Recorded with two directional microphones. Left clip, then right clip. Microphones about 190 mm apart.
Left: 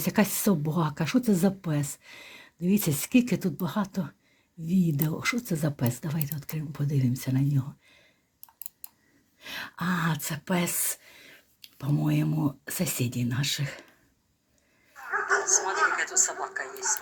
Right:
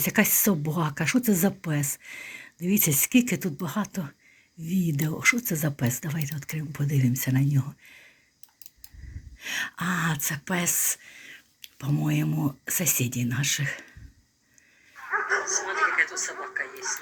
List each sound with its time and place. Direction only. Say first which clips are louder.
0.0 s speech: right 3 dB; centre (ahead or behind)
9.4 s speech: right 5 dB; 5° right (ahead or behind)
14.9 s bow-wow: even; 40° left (ahead or behind)